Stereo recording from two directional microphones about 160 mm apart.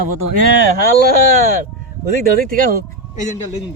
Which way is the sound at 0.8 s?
65° right (ahead or behind).